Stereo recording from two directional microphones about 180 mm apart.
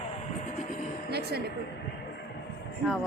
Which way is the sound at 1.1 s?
65° right (ahead or behind).